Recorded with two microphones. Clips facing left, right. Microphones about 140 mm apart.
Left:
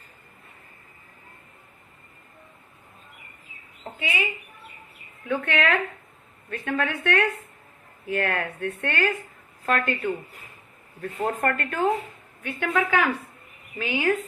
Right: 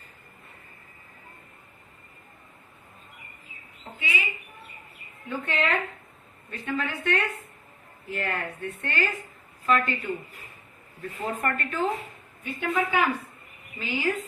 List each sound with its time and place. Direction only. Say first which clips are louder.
5.3 s a woman's voice: left 4 dB; 70° left (ahead or behind)
9.6 s speech: even; 50° left (ahead or behind)
12.4 s a woman's voice: left 2 dB; 70° left (ahead or behind)